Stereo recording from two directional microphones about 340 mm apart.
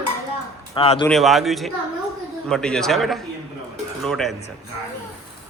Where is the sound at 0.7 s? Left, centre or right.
Centre.